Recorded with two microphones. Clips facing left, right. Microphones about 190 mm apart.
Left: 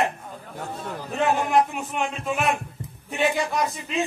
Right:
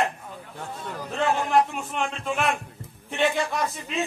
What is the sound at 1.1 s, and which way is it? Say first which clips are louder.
Speech: left 2 dB; 20° left (ahead or behind).